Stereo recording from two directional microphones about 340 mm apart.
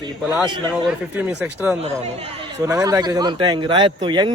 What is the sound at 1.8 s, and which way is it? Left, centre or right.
Speech, centre.